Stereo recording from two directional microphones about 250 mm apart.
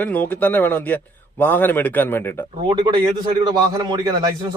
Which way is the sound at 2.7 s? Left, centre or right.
Centre.